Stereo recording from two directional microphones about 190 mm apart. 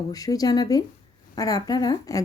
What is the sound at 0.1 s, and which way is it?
A woman's voice, 20° left (ahead or behind).